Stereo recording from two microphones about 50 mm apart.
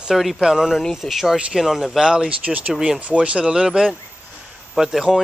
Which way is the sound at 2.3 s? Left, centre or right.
Right.